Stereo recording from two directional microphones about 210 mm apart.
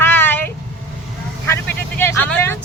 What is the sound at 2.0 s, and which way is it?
Speech, 10° left (ahead or behind).